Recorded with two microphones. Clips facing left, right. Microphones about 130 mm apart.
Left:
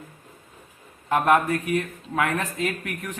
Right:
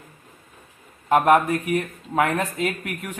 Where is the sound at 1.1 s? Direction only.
20° right (ahead or behind).